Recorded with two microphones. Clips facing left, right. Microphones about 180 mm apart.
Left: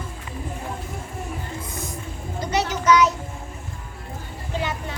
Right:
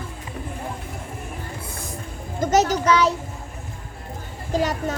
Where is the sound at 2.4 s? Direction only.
45° right (ahead or behind).